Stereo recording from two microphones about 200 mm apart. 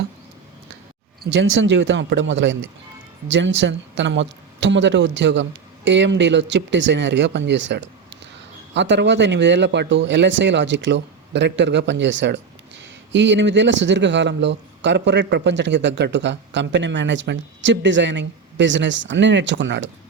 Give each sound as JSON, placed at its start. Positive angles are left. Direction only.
{"t": 1.2, "sound": "a man's voice", "side_deg": -60}